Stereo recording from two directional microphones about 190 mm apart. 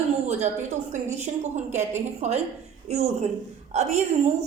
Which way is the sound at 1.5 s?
35° right (ahead or behind).